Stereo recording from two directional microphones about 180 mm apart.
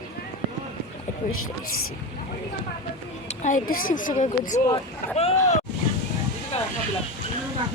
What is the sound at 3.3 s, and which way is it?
Speech, 45° left (ahead or behind).